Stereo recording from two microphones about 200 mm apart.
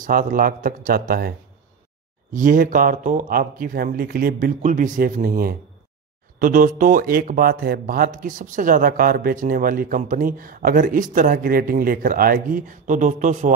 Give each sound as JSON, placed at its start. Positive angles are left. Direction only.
{"t": 0.0, "sound": "speech", "side_deg": -40}
{"t": 2.3, "sound": "speech", "side_deg": -40}